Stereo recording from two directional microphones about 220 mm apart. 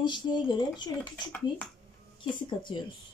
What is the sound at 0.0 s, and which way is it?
A woman's voice, 20° left (ahead or behind).